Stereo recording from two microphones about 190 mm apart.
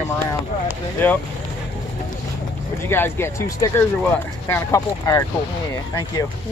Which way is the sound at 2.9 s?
10° left (ahead or behind).